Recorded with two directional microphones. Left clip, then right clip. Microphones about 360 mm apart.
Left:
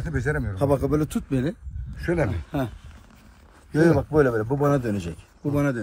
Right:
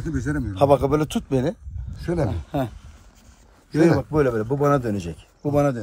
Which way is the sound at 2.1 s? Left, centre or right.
Centre.